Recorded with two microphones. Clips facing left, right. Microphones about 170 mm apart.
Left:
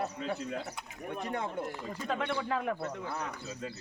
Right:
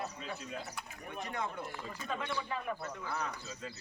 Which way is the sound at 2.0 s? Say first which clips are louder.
Left 5 dB; 65° left (ahead or behind).